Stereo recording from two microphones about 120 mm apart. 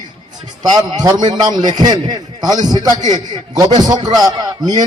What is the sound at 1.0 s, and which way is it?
A man's voice, 35° right (ahead or behind).